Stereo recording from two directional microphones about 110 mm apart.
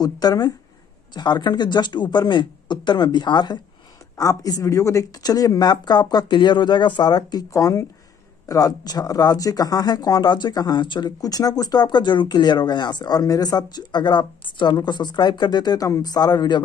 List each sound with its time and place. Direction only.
0.0 s speech: 35° left (ahead or behind)